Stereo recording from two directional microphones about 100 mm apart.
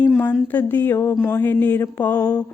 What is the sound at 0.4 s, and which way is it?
Mantra, 15° left (ahead or behind).